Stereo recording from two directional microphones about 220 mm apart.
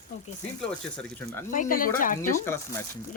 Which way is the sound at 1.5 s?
40° left (ahead or behind).